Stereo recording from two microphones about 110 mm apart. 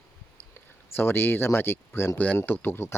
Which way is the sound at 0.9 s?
20° left (ahead or behind).